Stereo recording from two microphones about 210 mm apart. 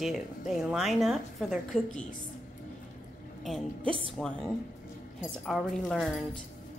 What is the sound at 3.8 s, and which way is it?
Speech, 25° right (ahead or behind).